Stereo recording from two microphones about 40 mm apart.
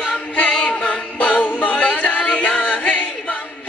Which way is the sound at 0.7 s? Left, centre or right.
Left.